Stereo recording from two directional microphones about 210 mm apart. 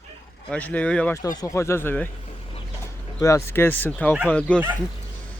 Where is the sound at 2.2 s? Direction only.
25° left (ahead or behind).